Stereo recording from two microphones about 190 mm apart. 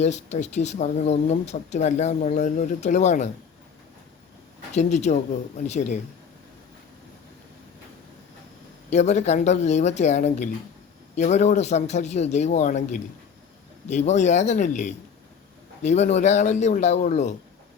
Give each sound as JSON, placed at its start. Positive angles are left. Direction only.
{"t": 0.0, "sound": "speech", "side_deg": 35}
{"t": 4.7, "sound": "speech", "side_deg": 35}
{"t": 8.9, "sound": "speech", "side_deg": 35}